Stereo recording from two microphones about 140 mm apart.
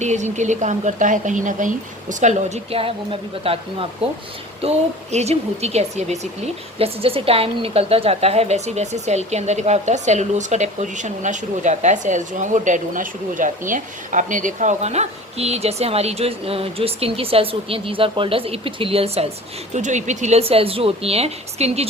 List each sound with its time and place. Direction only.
0.0 s speech: 55° right (ahead or behind)
19.7 s speech: 60° right (ahead or behind)